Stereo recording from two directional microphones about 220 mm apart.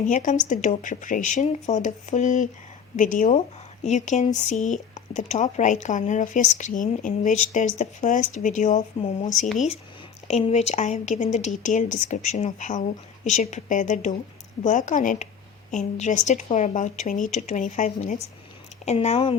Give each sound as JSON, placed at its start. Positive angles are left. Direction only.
{"t": 0.0, "sound": "speech", "side_deg": 35}
{"t": 10.2, "sound": "speech", "side_deg": 30}